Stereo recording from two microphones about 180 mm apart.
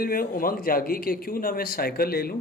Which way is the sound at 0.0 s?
55° left (ahead or behind).